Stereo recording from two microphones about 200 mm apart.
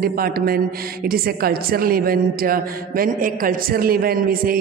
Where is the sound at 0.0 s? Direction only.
50° right (ahead or behind).